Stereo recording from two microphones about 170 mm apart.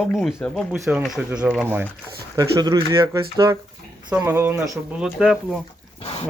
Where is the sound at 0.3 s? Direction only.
10° left (ahead or behind).